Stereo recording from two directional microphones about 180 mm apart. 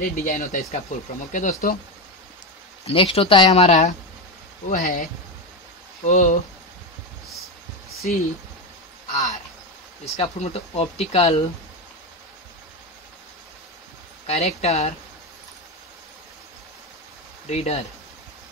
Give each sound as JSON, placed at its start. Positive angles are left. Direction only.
{"t": 0.0, "sound": "speech", "side_deg": 45}
{"t": 2.9, "sound": "speech", "side_deg": 30}
{"t": 3.6, "sound": "speech", "side_deg": 40}
{"t": 6.0, "sound": "speech", "side_deg": 45}
{"t": 8.0, "sound": "speech", "side_deg": 45}
{"t": 9.1, "sound": "a sound", "side_deg": 40}
{"t": 10.0, "sound": "speech", "side_deg": 35}
{"t": 14.2, "sound": "speech", "side_deg": 35}
{"t": 17.5, "sound": "speech", "side_deg": 35}